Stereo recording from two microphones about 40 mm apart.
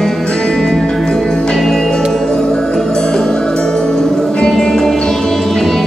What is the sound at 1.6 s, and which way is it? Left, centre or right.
Music, centre.